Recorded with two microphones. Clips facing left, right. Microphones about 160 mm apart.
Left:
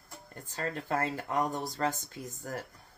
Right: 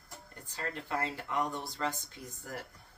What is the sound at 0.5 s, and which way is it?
Speech, 45° left (ahead or behind).